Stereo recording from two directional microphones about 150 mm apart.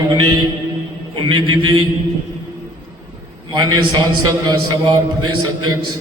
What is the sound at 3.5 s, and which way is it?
A man's voice, 25° right (ahead or behind).